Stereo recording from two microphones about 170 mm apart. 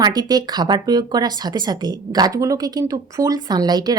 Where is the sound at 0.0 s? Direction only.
25° right (ahead or behind).